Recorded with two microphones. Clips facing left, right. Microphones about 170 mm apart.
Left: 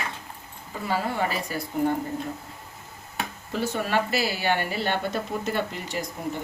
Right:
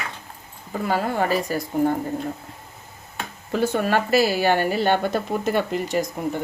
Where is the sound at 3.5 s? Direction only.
50° right (ahead or behind).